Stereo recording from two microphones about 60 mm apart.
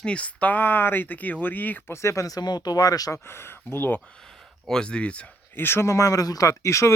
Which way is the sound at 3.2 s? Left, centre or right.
Left.